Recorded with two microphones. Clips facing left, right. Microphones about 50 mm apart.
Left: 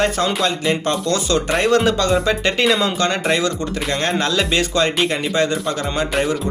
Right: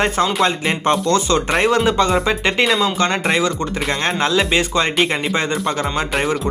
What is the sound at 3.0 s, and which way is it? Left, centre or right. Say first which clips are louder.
Speech: right 1 dB; right.